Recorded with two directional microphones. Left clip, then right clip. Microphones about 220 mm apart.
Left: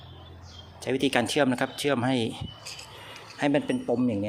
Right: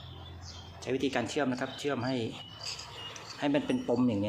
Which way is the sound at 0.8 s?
35° left (ahead or behind).